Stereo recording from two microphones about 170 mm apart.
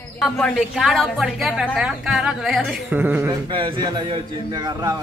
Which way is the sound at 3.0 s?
10° right (ahead or behind).